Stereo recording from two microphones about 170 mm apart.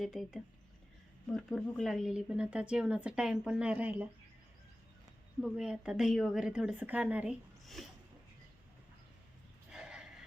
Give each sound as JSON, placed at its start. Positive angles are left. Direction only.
{"t": 0.0, "sound": "speech", "side_deg": 0}
{"t": 5.4, "sound": "speech", "side_deg": -5}
{"t": 9.7, "sound": "a sound", "side_deg": -5}